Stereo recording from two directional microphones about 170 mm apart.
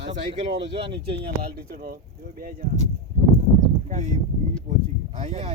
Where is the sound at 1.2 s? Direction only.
65° right (ahead or behind).